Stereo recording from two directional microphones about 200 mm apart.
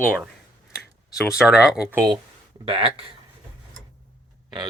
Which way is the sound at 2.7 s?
30° right (ahead or behind).